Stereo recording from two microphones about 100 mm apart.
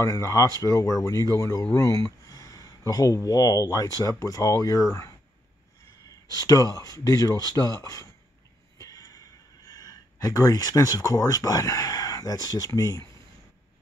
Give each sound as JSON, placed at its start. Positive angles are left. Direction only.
{"t": 0.0, "sound": "speech", "side_deg": 30}
{"t": 6.0, "sound": "speech", "side_deg": 35}
{"t": 8.7, "sound": "a sound", "side_deg": 35}
{"t": 9.7, "sound": "speech", "side_deg": 35}